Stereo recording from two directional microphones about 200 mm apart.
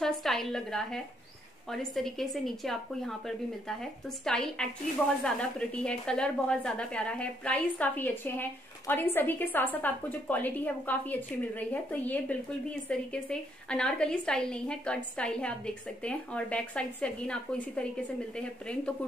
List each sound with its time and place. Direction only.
0.0 s a woman's voice: centre (ahead or behind)